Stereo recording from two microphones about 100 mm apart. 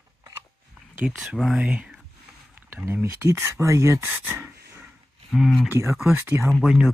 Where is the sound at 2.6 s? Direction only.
25° right (ahead or behind).